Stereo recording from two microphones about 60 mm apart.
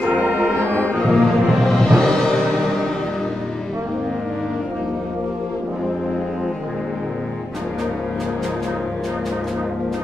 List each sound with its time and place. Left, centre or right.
0.7 s music: left
1.2 s music: centre